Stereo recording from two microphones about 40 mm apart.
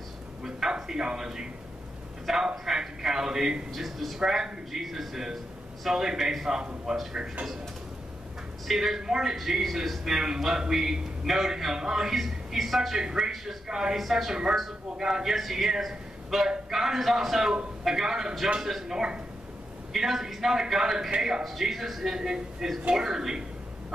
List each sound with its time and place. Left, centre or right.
0.4 s a sound: centre
2.2 s a man's voice: centre
3.7 s speech: centre
4.2 s a man's voice: centre
8.6 s a man's voice: centre
13.7 s a man's voice: centre
13.9 s speech: centre
15.0 s a man's voice: centre
15.3 s a man's voice: centre
19.9 s a man's voice: centre